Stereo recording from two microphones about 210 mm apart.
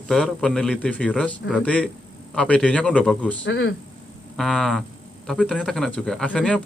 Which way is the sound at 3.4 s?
60° left (ahead or behind).